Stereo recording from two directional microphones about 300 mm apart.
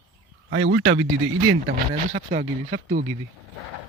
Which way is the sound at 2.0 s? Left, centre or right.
Right.